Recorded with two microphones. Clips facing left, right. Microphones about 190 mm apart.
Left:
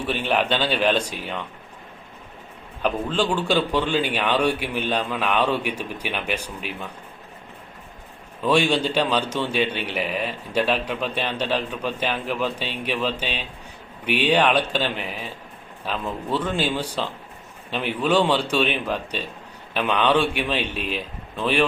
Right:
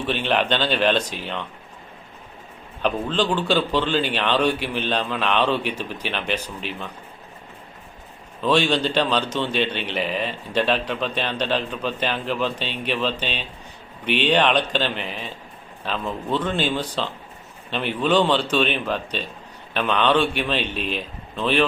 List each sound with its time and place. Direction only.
0.0 s a man's voice: 10° left (ahead or behind)
2.8 s a man's voice: 10° left (ahead or behind)
8.4 s a man's voice: 10° left (ahead or behind)